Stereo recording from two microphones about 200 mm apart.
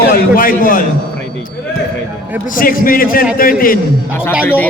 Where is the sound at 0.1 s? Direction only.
45° left (ahead or behind).